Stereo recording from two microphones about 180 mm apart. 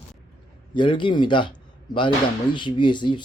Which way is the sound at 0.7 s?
25° left (ahead or behind).